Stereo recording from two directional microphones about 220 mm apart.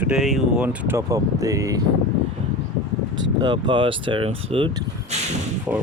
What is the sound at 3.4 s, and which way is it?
Speech, 20° right (ahead or behind).